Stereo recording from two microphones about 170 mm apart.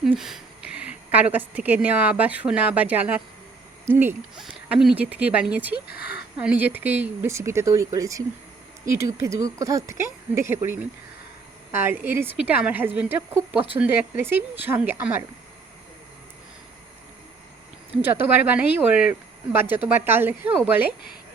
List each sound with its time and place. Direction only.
0.0 s a woman's voice: centre (ahead or behind)
5.9 s speech: 70° left (ahead or behind)
6.3 s a woman's voice: 5° right (ahead or behind)
18.0 s a woman's voice: 10° right (ahead or behind)